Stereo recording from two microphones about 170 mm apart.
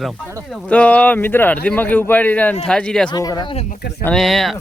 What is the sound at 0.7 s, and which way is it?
A man's voice, 10° left (ahead or behind).